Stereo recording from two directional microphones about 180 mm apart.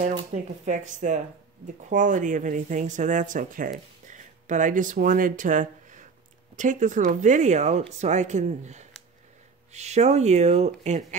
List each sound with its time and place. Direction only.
0.3 s speech: 45° right (ahead or behind)